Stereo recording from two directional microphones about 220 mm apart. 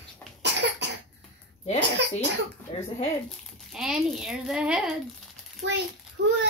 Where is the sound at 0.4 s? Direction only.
50° right (ahead or behind).